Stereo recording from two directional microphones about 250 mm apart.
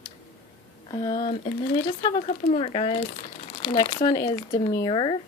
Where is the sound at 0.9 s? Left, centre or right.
Centre.